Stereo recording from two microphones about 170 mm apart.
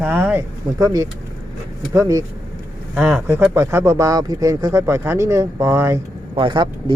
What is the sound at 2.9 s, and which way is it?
Speech, centre (ahead or behind).